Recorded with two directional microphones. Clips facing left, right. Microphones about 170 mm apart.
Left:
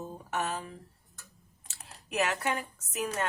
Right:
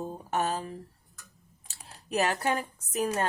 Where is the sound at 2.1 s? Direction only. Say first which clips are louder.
Right 3 dB; 35° right (ahead or behind).